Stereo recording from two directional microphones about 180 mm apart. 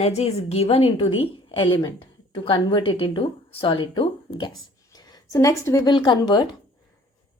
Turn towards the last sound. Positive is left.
turn(degrees=25)  # may be behind; listen again after turning